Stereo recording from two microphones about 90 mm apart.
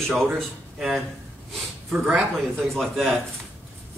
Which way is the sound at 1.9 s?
15° right (ahead or behind).